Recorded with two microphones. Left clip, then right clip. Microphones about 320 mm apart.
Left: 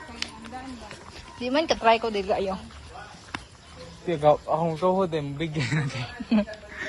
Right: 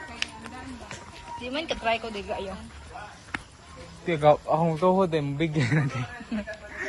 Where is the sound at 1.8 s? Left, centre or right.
Centre.